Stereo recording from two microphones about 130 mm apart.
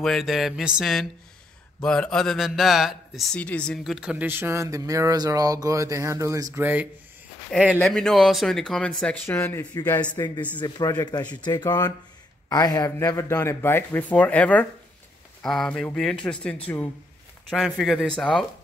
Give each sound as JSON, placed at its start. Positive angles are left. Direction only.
{"t": 0.0, "sound": "speech", "side_deg": 0}
{"t": 3.3, "sound": "speech", "side_deg": 10}
{"t": 7.7, "sound": "speech", "side_deg": 5}
{"t": 10.1, "sound": "speech", "side_deg": 30}